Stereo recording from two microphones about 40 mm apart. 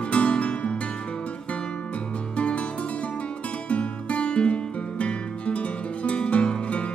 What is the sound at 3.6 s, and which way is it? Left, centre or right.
Music, left.